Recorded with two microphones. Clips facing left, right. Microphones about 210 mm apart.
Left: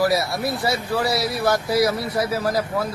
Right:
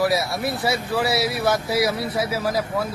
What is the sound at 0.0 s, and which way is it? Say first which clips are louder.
Speech: left 1 dB; centre (ahead or behind).